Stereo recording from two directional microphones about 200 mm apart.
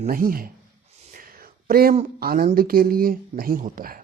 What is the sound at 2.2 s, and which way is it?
Speech, 50° right (ahead or behind).